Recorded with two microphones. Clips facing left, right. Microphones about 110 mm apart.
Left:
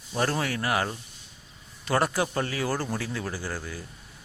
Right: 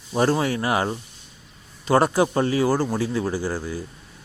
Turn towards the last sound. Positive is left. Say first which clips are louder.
# right 8 dB
turn(degrees=-20)  # may be behind; listen again after turning